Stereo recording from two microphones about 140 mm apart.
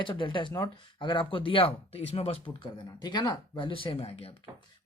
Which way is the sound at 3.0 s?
30° left (ahead or behind).